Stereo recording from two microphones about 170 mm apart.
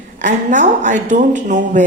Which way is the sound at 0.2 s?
50° right (ahead or behind).